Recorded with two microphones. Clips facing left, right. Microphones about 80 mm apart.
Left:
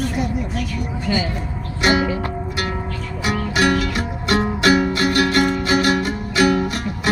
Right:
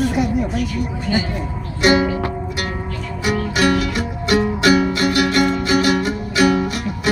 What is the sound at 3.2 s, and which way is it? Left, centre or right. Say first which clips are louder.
Music: right 1 dB; left.